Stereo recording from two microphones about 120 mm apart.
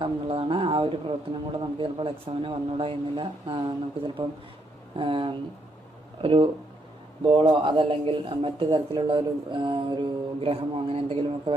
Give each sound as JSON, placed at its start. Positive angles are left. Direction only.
{"t": 0.0, "sound": "a man's voice", "side_deg": -45}